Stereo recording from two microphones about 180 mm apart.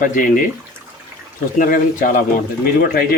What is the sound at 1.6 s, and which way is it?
Speech, 50° left (ahead or behind).